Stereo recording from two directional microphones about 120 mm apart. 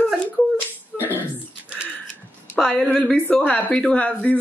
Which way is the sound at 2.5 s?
5° left (ahead or behind).